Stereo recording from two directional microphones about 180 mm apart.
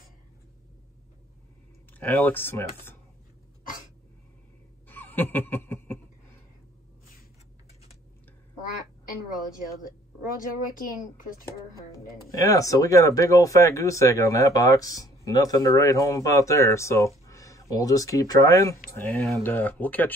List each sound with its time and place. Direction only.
2.0 s speech: 10° left (ahead or behind)
4.8 s a sound: 10° left (ahead or behind)
11.7 s speech: 20° left (ahead or behind)